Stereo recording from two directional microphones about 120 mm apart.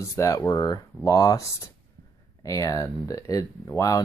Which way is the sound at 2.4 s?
30° left (ahead or behind).